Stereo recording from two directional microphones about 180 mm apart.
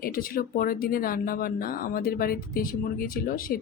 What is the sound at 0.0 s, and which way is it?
Speech, 55° left (ahead or behind).